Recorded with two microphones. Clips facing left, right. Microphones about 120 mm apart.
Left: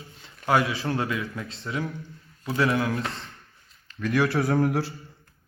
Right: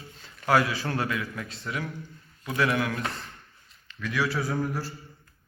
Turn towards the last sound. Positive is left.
turn(degrees=70)  # may be behind; listen again after turning